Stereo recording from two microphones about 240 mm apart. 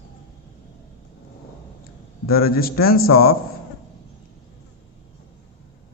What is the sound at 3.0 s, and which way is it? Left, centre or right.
Speech, left.